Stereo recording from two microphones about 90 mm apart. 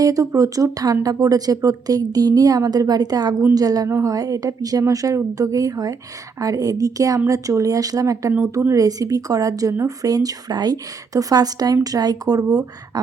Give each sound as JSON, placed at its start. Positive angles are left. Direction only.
{"t": 0.0, "sound": "speech", "side_deg": -40}